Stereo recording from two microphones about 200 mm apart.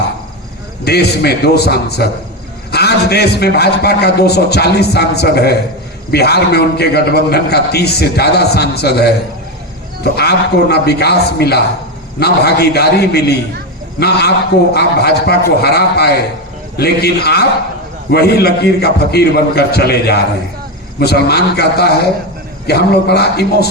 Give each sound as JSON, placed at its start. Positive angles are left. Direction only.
{"t": 0.9, "sound": "a man's voice", "side_deg": 55}
{"t": 14.7, "sound": "a man's voice", "side_deg": 50}